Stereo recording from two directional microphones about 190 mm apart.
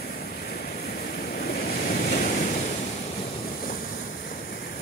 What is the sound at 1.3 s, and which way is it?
Waves, 55° left (ahead or behind).